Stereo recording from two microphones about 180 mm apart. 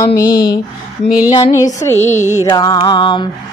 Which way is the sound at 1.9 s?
40° left (ahead or behind).